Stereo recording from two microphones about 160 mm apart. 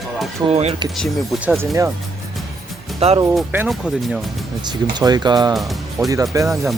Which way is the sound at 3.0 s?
40° right (ahead or behind).